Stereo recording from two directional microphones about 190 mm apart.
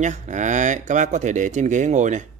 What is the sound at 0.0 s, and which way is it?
A man's voice, 40° right (ahead or behind).